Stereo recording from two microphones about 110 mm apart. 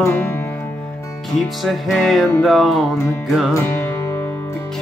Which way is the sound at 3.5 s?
20° left (ahead or behind).